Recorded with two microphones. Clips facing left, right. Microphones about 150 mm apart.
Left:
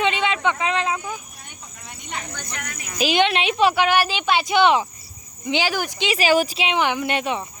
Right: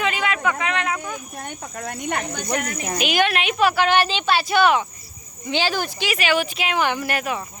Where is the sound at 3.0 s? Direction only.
25° left (ahead or behind).